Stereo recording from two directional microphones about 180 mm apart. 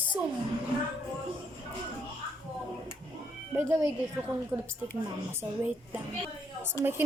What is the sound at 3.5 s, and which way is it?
A woman's voice, 10° right (ahead or behind).